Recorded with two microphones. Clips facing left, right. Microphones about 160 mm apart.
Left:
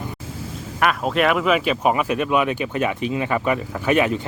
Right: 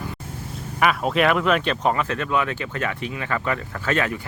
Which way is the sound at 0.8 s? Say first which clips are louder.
Even; centre (ahead or behind).